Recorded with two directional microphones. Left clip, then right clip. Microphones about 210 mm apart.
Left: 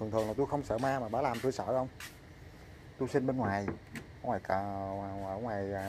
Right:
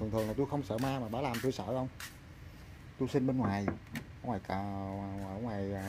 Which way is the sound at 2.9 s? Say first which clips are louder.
Left 1 dB; 30° right (ahead or behind).